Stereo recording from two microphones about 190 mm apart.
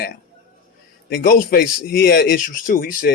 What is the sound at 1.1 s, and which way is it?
A man's voice, 45° left (ahead or behind).